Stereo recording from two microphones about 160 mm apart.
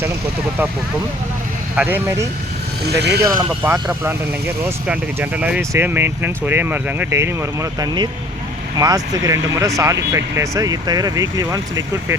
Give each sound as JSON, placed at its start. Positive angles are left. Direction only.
{"t": 1.7, "sound": "speech", "side_deg": -10}
{"t": 3.0, "sound": "speech", "side_deg": -90}
{"t": 3.2, "sound": "speech", "side_deg": -20}
{"t": 4.9, "sound": "speech", "side_deg": -10}